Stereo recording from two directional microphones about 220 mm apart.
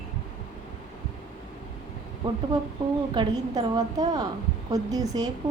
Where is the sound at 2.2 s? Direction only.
20° right (ahead or behind).